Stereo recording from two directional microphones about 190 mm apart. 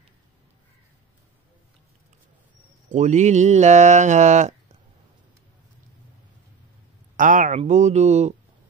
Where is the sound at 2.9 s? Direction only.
40° right (ahead or behind).